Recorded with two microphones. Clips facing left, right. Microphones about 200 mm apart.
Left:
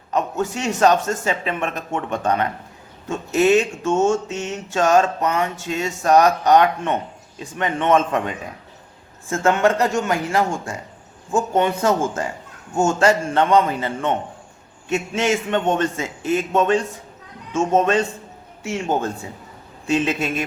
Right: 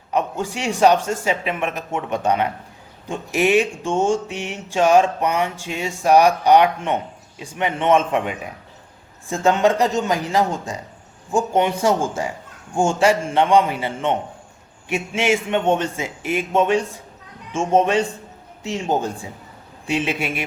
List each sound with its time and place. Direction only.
0.1 s a man's voice: 10° right (ahead or behind)